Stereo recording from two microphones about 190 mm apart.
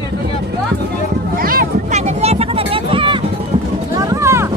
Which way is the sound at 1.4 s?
50° right (ahead or behind).